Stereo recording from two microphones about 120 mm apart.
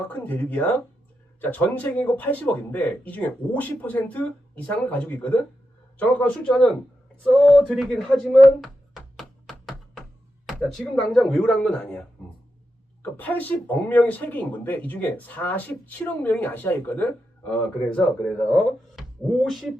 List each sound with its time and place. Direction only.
0.1 s speech: 15° left (ahead or behind)
8.6 s music: centre (ahead or behind)
10.8 s speech: 5° left (ahead or behind)
13.0 s speech: 15° left (ahead or behind)